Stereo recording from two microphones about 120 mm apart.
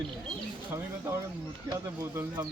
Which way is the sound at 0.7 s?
20° right (ahead or behind).